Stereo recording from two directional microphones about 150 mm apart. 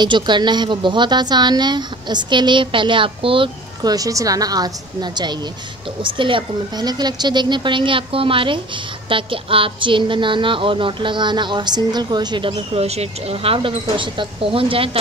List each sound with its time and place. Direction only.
0.0 s a woman's voice: 30° right (ahead or behind)